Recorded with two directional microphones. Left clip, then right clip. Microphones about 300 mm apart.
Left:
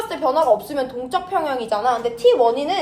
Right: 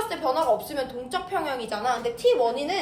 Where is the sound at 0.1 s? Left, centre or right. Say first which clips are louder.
Left 8 dB; centre.